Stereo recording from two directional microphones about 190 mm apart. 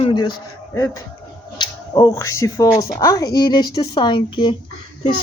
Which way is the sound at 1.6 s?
20° left (ahead or behind).